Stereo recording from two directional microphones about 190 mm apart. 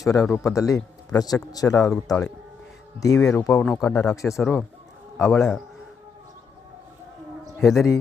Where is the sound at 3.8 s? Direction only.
5° left (ahead or behind).